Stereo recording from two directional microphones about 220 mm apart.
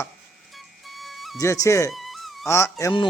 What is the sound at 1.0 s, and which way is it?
Music, centre (ahead or behind).